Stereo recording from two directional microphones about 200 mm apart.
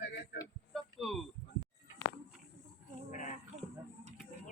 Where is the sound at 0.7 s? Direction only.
Centre (ahead or behind).